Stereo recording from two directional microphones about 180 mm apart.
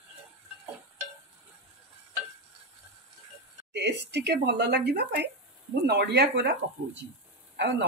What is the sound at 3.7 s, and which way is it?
Speech, 70° right (ahead or behind).